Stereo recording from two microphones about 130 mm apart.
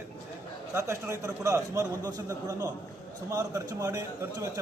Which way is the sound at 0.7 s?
20° right (ahead or behind).